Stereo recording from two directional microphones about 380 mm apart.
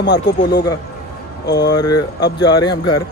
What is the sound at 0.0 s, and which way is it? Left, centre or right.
Speech, left.